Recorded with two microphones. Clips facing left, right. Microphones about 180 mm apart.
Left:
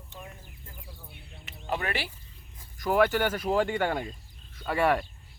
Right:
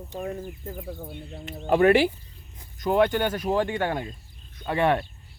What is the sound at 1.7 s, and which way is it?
Speech, 50° right (ahead or behind).